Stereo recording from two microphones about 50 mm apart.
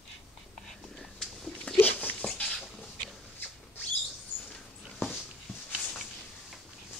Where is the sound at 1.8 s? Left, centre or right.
Left.